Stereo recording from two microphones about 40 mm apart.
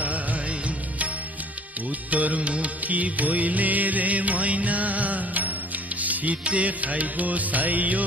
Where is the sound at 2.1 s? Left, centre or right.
Right.